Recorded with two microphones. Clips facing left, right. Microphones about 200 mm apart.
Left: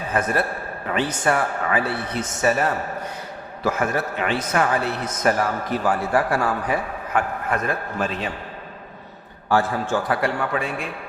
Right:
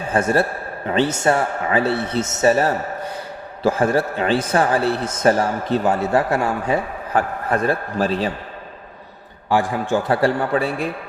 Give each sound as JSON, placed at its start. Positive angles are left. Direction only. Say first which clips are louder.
{"t": 0.1, "sound": "a man's voice", "louder": "right 5 dB", "side_deg": -30}
{"t": 9.5, "sound": "a man's voice", "louder": "right 2 dB", "side_deg": -15}
{"t": 10.1, "sound": "a man's voice", "louder": "right 5 dB", "side_deg": -30}